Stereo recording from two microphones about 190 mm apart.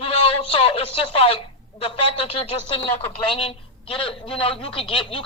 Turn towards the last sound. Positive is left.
turn(degrees=25)  # may be behind; listen again after turning